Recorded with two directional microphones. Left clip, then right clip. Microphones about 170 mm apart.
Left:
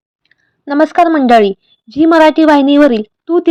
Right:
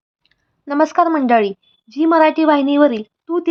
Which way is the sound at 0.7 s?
15° left (ahead or behind).